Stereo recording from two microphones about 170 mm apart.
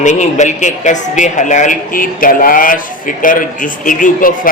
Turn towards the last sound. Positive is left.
turn(degrees=50)  # may be behind; listen again after turning